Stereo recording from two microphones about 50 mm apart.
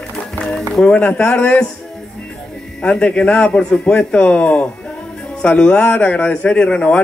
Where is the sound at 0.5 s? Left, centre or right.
Centre.